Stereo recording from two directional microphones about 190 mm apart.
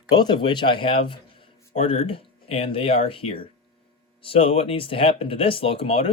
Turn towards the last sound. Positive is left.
turn(degrees=30)  # may be behind; listen again after turning